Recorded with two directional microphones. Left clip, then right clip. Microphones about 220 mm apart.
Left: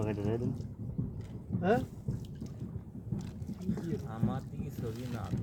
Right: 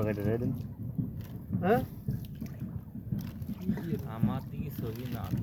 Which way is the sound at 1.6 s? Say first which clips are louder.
Right 2 dB; 20° left (ahead or behind).